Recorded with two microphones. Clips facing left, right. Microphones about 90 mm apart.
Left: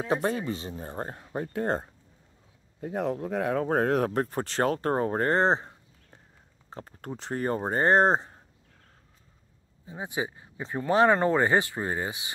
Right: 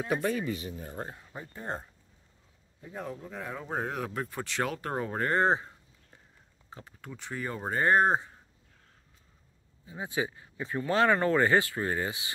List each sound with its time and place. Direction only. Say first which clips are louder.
0.1 s speech: left 3 dB; 30° left (ahead or behind)
1.1 s speech: left 12 dB; 55° left (ahead or behind); by 5.7 s 35° left (ahead or behind)
6.7 s speech: left 7 dB; 40° left (ahead or behind)
7.6 s speech: left 2 dB; 35° left (ahead or behind)
9.8 s speech: left 1 dB; 20° left (ahead or behind)